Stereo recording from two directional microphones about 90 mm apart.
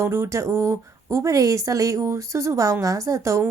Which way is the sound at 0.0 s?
30° right (ahead or behind).